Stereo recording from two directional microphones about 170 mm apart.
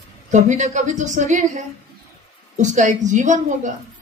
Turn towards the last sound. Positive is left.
turn(degrees=-45)  # may be behind; listen again after turning